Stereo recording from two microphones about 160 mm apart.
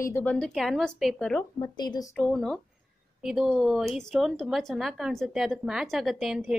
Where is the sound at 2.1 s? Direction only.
5° left (ahead or behind).